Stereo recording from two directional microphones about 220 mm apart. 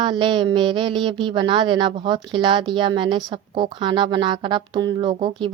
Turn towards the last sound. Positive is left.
turn(degrees=-20)  # may be behind; listen again after turning